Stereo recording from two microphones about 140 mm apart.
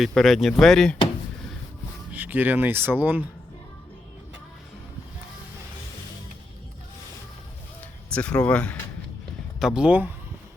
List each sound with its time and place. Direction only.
0.1 s speech: centre (ahead or behind)
2.1 s speech: 15° right (ahead or behind)
8.1 s speech: 10° left (ahead or behind)
9.6 s speech: 5° right (ahead or behind)